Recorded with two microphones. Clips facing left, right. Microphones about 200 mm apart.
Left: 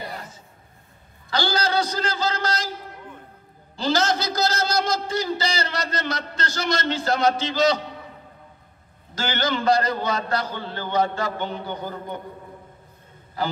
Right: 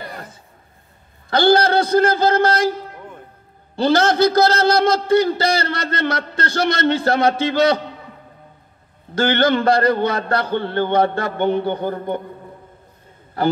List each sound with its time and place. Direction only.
0.1 s a sound: 55° right (ahead or behind)
1.3 s a man's voice: 55° right (ahead or behind)
3.7 s a man's voice: 60° right (ahead or behind)
9.1 s a man's voice: 60° right (ahead or behind)